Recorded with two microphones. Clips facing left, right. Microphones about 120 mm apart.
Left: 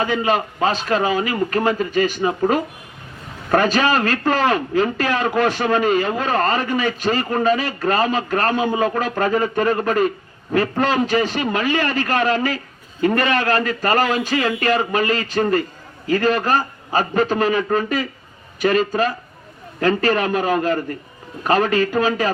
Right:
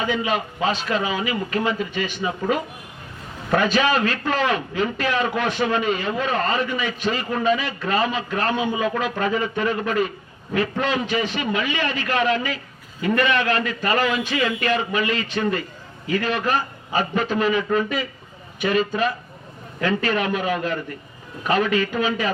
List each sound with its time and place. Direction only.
0.0 s a man's voice: 45° left (ahead or behind)